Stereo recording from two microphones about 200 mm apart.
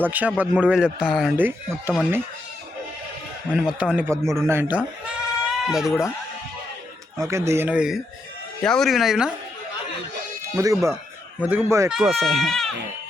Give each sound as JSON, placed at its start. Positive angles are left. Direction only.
{"t": 0.0, "sound": "speech", "side_deg": -10}
{"t": 3.5, "sound": "speech", "side_deg": -5}
{"t": 7.2, "sound": "speech", "side_deg": -15}
{"t": 10.4, "sound": "speech", "side_deg": -15}